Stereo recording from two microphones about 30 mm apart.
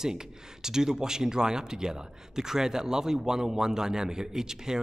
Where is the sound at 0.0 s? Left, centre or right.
Centre.